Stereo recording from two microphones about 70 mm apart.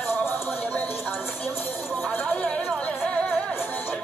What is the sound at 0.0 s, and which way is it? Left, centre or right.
Music, left.